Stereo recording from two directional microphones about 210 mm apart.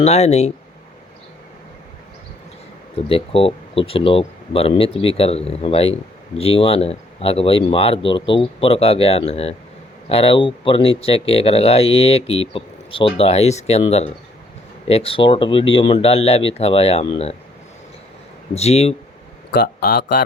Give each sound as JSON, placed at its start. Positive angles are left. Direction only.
{"t": 0.0, "sound": "speech", "side_deg": 30}
{"t": 3.1, "sound": "speech", "side_deg": 25}
{"t": 18.5, "sound": "speech", "side_deg": 30}
{"t": 19.5, "sound": "speech", "side_deg": 45}